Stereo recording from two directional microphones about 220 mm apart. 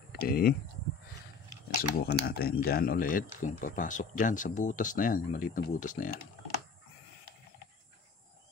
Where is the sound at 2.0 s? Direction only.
45° left (ahead or behind).